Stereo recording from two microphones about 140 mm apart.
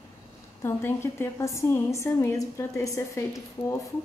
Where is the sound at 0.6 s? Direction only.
15° left (ahead or behind).